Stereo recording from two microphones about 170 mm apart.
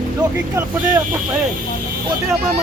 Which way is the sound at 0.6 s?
15° right (ahead or behind).